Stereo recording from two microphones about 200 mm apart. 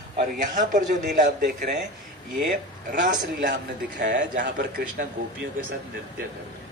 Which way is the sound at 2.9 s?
40° right (ahead or behind).